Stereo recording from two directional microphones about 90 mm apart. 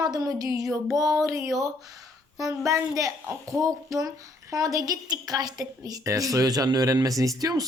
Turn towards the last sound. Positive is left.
turn(degrees=-40)  # may be behind; listen again after turning